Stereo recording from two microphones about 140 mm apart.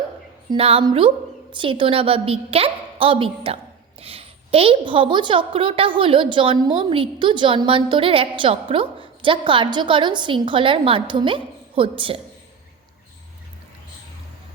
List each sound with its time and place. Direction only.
0.5 s a woman's voice: 40° right (ahead or behind)